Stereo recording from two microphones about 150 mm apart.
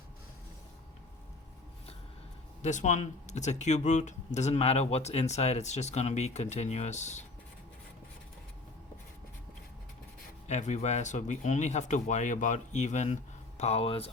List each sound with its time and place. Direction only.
2.6 s speech: 55° left (ahead or behind)
10.4 s speech: 50° left (ahead or behind)